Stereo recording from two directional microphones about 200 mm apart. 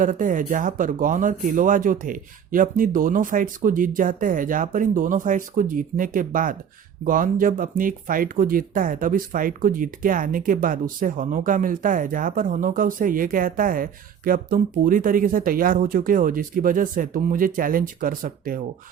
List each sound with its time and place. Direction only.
0.0 s speech: 40° right (ahead or behind)